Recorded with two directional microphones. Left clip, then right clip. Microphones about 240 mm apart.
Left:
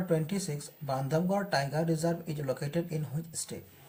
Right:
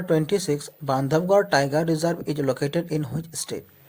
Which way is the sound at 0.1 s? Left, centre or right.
Right.